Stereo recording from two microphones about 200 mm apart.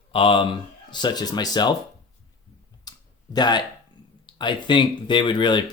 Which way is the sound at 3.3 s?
20° left (ahead or behind).